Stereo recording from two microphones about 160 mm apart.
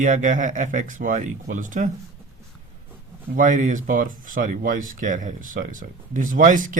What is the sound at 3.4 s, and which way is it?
Speech, 55° right (ahead or behind).